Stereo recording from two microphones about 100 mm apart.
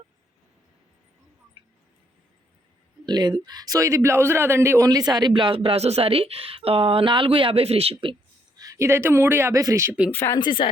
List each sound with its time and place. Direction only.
1.6 s a sound: 65° right (ahead or behind)
3.1 s a man's voice: 45° right (ahead or behind); by 4.9 s 25° right (ahead or behind)
4.9 s a woman's voice: 40° right (ahead or behind); by 8.1 s 75° right (ahead or behind)
8.5 s speech: 35° right (ahead or behind)
10.1 s speech: 25° left (ahead or behind)
10.3 s speech: 50° left (ahead or behind)